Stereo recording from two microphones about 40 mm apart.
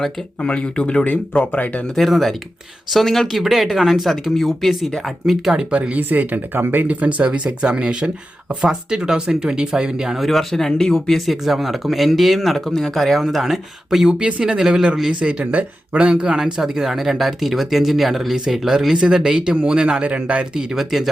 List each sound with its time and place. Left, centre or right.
0.3 s speech: left
1.0 s speech: left
2.0 s speech: centre
5.5 s speech: right
5.9 s speech: right
6.8 s speech: right; by 10.2 s centre
10.2 s speech: centre
11.4 s speech: centre
14.1 s speech: right
15.2 s speech: right
16.4 s speech: centre; by 20.4 s right
20.4 s speech: centre